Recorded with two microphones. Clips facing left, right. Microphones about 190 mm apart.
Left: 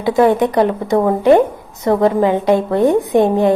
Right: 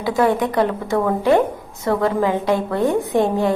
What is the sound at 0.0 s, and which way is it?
A woman's voice, 20° left (ahead or behind).